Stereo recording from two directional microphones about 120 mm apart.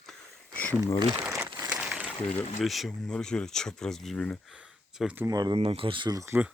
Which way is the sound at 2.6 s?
Centre (ahead or behind).